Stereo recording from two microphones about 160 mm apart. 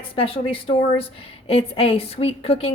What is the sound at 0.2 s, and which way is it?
A woman's voice, 35° left (ahead or behind).